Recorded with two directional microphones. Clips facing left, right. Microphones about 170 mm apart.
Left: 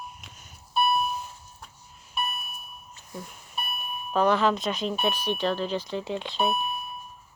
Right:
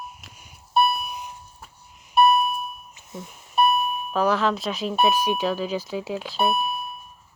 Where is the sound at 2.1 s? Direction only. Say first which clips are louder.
Right 16 dB; 65° right (ahead or behind).